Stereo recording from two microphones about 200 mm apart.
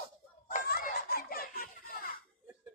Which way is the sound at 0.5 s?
45° left (ahead or behind).